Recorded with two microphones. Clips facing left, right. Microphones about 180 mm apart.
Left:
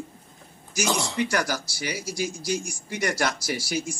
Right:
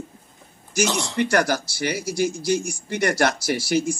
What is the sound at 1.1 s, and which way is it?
Speech, 60° right (ahead or behind).